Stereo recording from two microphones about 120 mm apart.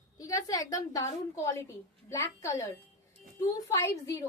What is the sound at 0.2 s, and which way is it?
A woman's voice, 30° left (ahead or behind).